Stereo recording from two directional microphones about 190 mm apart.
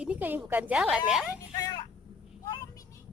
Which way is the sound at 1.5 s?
20° left (ahead or behind).